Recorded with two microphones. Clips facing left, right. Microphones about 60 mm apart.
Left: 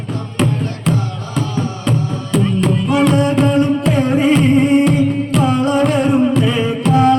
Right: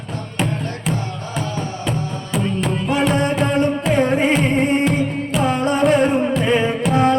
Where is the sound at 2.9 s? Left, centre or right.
Right.